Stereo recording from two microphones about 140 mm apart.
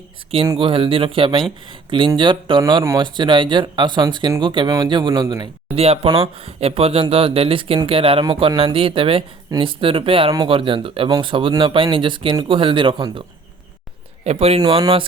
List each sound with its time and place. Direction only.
0.4 s speech: 35° right (ahead or behind)
5.7 s speech: 45° right (ahead or behind)
14.3 s speech: 45° right (ahead or behind)